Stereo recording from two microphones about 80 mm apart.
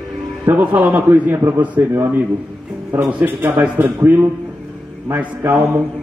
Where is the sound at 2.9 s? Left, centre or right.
Centre.